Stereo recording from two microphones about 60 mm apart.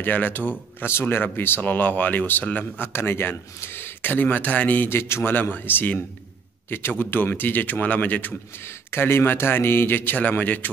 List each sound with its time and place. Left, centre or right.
0.0 s a man's voice: left
2.9 s a man's voice: left
4.9 s a man's voice: left
8.6 s a man's voice: left